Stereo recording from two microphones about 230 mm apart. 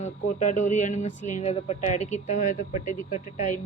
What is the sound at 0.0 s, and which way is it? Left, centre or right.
A woman's voice, left.